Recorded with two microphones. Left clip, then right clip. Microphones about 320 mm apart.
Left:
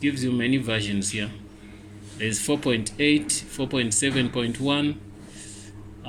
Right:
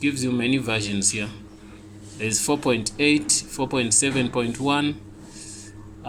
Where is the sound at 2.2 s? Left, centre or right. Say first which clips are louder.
Right 2 dB; centre.